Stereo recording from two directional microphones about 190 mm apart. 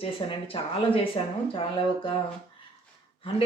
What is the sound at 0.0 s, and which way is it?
Speech, 30° left (ahead or behind).